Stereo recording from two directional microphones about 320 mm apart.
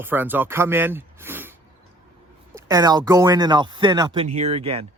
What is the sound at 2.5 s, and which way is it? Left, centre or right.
A man's voice, centre.